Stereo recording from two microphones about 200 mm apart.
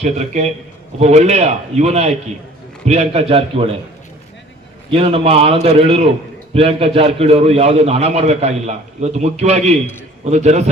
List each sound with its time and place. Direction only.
0.0 s a man's voice: 35° right (ahead or behind)
4.9 s a man's voice: 30° right (ahead or behind)